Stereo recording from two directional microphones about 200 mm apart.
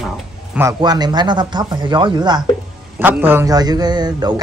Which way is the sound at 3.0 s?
10° right (ahead or behind).